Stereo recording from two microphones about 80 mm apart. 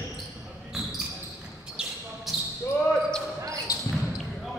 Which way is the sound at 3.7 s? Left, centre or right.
Left.